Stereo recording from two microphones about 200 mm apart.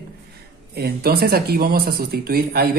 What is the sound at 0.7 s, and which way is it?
Speech, 50° right (ahead or behind).